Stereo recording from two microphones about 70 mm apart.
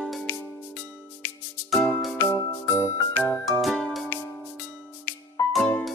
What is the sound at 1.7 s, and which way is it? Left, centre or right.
Music, centre.